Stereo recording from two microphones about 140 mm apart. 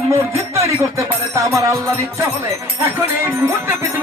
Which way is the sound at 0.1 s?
20° right (ahead or behind).